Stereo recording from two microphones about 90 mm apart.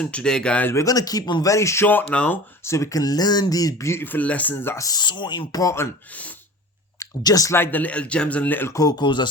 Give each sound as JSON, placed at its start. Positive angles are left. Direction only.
{"t": 0.0, "sound": "speech", "side_deg": 10}
{"t": 0.7, "sound": "speech", "side_deg": 35}
{"t": 2.6, "sound": "speech", "side_deg": 35}
{"t": 4.8, "sound": "speech", "side_deg": 50}
{"t": 7.0, "sound": "speech", "side_deg": 45}
{"t": 7.5, "sound": "speech", "side_deg": 20}
{"t": 8.7, "sound": "speech", "side_deg": 40}
{"t": 9.0, "sound": "speech", "side_deg": 55}